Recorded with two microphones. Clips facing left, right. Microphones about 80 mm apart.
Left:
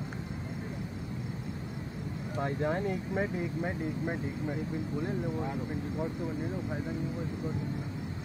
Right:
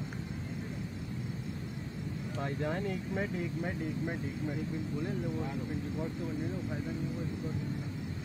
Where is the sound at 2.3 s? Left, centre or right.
Left.